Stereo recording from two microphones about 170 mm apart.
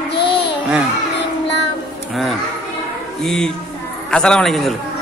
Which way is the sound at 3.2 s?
5° left (ahead or behind).